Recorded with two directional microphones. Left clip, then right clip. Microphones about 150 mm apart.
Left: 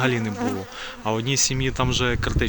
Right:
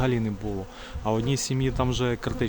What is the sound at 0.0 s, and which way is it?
Speech, 5° right (ahead or behind).